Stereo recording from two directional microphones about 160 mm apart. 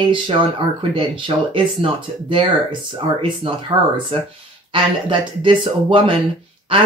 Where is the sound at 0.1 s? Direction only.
30° right (ahead or behind).